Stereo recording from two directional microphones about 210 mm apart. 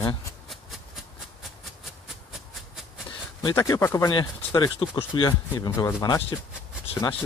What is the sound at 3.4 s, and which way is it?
A man's voice, 15° left (ahead or behind).